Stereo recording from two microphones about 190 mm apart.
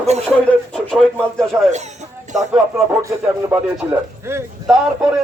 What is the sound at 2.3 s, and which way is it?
A man's voice, 5° right (ahead or behind).